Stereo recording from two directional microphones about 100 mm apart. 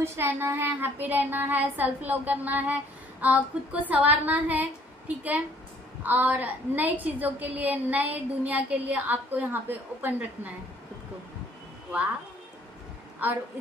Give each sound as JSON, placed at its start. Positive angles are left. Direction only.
{"t": 0.0, "sound": "speech", "side_deg": -25}